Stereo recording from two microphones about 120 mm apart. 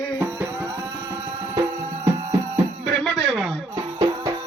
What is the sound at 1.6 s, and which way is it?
Music, 25° right (ahead or behind).